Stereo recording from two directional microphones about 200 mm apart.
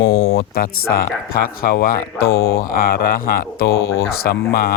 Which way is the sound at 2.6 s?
45° left (ahead or behind).